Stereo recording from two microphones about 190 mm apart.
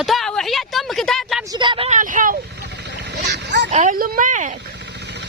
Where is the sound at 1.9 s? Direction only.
45° right (ahead or behind).